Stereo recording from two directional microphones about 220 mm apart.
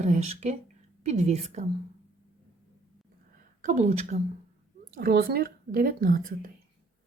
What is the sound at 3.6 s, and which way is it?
Speech, 35° right (ahead or behind).